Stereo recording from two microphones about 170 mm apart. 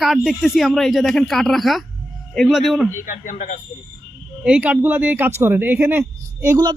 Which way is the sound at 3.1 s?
50° left (ahead or behind).